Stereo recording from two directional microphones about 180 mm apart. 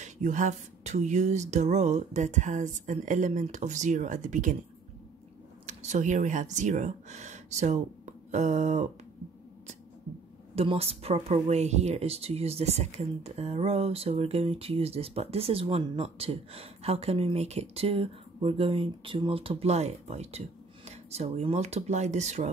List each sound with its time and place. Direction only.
0.0 s speech: 40° right (ahead or behind)
5.7 s speech: 40° right (ahead or behind)
10.5 s speech: 35° right (ahead or behind)